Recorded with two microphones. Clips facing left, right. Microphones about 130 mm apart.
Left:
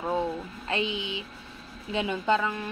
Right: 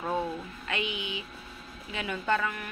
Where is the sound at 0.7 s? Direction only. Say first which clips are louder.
Left 4 dB; 30° left (ahead or behind).